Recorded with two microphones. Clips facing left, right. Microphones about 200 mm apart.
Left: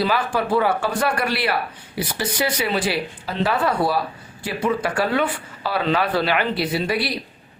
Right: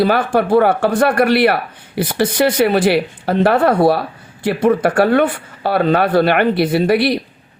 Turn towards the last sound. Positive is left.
turn(degrees=-60)  # may be behind; listen again after turning